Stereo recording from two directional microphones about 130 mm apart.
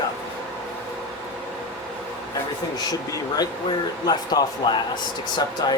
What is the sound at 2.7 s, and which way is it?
Speech, 30° left (ahead or behind).